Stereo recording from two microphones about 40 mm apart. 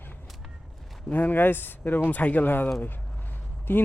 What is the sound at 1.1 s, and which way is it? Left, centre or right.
Speech, left.